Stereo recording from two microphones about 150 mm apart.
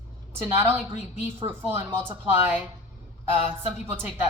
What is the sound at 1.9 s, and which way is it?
Speech, 15° right (ahead or behind).